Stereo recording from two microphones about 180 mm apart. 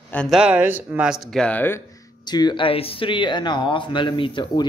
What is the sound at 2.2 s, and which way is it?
Speech, 25° left (ahead or behind).